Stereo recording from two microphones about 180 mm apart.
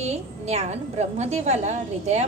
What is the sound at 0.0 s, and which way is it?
A woman's voice, 35° right (ahead or behind).